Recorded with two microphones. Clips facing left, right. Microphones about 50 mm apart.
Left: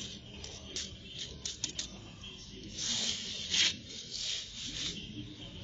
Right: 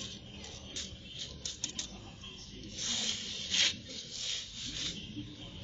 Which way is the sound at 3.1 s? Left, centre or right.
Centre.